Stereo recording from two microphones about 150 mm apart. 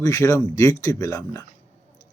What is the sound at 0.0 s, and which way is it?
Speech, 20° left (ahead or behind).